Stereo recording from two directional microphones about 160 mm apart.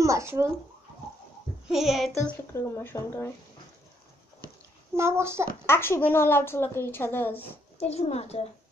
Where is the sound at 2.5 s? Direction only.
15° left (ahead or behind).